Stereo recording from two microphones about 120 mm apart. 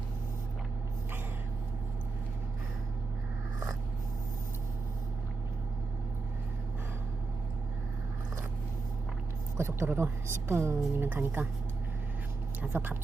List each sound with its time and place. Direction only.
9.6 s speech: 20° right (ahead or behind)
12.7 s a woman's voice: 15° right (ahead or behind)